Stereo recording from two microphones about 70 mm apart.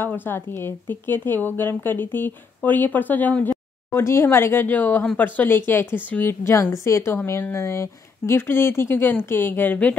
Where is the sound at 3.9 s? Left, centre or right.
Left.